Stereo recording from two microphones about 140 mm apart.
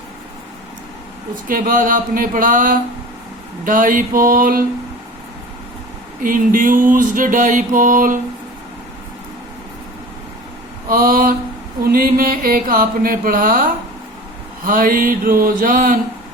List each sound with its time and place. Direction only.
1.5 s mantra: 80° right
6.2 s mantra: 75° right (ahead or behind)
10.8 s a sound: 90° right
11.9 s mantra: 90° right; by 16.0 s 75° right (ahead or behind)